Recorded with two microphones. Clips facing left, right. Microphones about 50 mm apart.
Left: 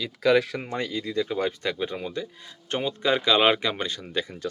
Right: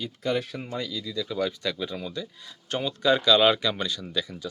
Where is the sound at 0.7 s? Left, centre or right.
Left.